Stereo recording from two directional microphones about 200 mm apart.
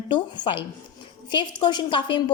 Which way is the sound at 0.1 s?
25° left (ahead or behind).